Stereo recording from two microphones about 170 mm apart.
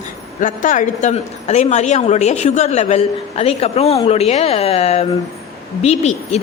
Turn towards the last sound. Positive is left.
turn(degrees=40)  # may be behind; listen again after turning